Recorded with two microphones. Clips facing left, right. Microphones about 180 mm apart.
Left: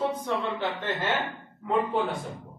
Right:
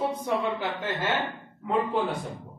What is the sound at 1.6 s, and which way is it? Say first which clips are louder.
Speech: even; centre (ahead or behind).